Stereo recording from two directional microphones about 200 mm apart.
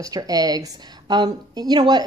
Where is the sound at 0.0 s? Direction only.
20° right (ahead or behind).